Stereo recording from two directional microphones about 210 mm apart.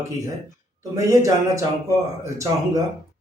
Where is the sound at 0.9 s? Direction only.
15° right (ahead or behind).